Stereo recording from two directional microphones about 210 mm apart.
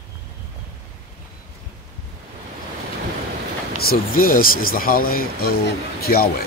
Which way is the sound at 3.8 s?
45° left (ahead or behind).